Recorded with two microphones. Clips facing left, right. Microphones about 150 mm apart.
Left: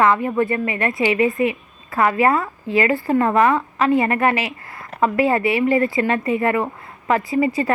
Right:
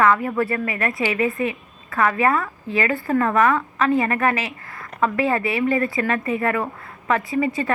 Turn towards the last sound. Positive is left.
turn(degrees=35)  # may be behind; listen again after turning